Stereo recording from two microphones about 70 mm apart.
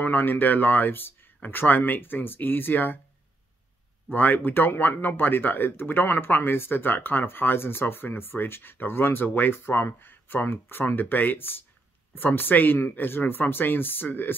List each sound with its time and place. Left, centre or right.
0.0 s speech: left
4.1 s speech: left